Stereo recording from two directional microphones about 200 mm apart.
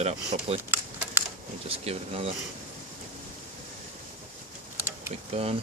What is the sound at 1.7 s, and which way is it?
Speech, 30° right (ahead or behind).